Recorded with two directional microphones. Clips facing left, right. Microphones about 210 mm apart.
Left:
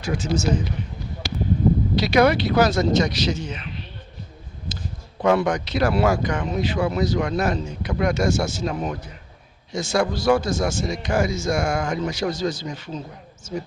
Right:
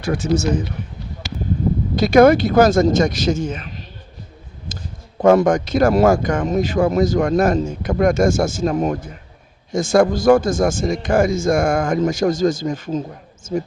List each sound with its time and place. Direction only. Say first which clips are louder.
0.0 s speech: right 5 dB; 60° right (ahead or behind)
2.0 s speech: right 8 dB; 50° right (ahead or behind)
5.2 s speech: right 7 dB; 45° right (ahead or behind)